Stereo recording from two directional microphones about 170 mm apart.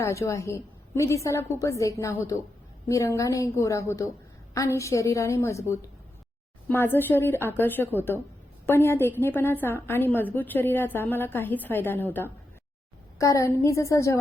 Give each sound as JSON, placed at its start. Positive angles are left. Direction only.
{"t": 0.0, "sound": "a woman's voice", "side_deg": 15}